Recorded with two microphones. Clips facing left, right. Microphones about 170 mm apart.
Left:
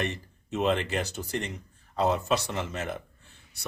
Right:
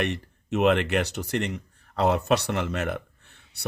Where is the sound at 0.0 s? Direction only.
70° right (ahead or behind).